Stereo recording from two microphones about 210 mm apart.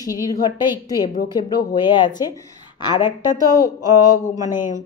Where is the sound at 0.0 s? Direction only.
15° left (ahead or behind).